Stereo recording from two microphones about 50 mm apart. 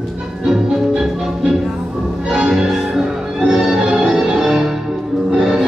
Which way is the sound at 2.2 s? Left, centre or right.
Right.